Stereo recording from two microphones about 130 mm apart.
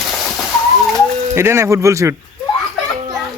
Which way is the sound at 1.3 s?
20° right (ahead or behind).